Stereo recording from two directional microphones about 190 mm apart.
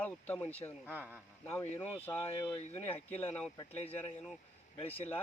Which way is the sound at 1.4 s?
10° left (ahead or behind).